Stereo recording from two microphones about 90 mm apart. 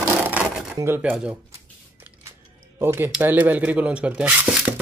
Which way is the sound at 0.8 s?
25° right (ahead or behind).